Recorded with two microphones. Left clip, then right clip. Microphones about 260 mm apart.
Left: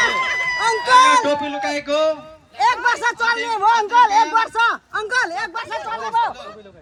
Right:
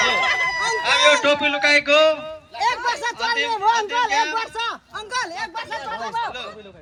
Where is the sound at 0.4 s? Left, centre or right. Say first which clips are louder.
Left 3 dB; left.